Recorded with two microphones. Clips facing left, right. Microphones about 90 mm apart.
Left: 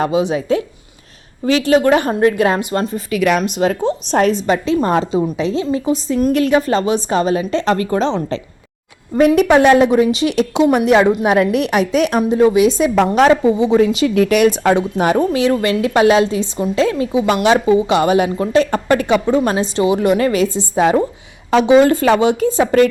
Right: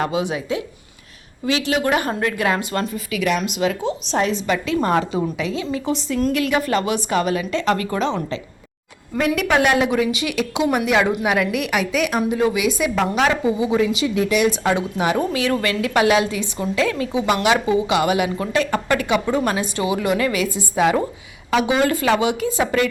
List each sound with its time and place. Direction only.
0.0 s a woman's voice: 25° left (ahead or behind)
0.3 s a woman's voice: 40° left (ahead or behind); by 2.9 s 20° left (ahead or behind)
2.9 s speech: 45° left (ahead or behind)
3.5 s a woman's voice: 40° left (ahead or behind)
6.1 s a woman's voice: 20° left (ahead or behind)
6.3 s a woman's voice: 35° left (ahead or behind)
11.2 s a woman's voice: 35° left (ahead or behind)
14.1 s speech: 60° left (ahead or behind); by 15.4 s 45° left (ahead or behind)
15.4 s a woman's voice: 30° left (ahead or behind)
17.4 s a woman's voice: 35° left (ahead or behind)